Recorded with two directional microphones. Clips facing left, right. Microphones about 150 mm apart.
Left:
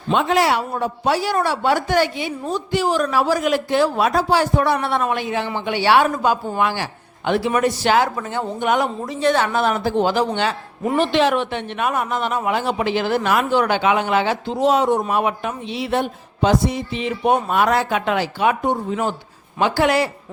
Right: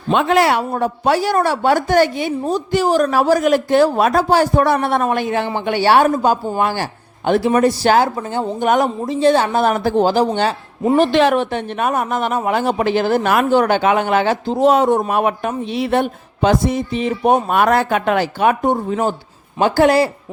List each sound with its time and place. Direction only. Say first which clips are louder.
0.1 s speech: right 3 dB; 60° right (ahead or behind); by 8.9 s 40° right (ahead or behind)
9.0 s speech: right 5 dB; 30° right (ahead or behind)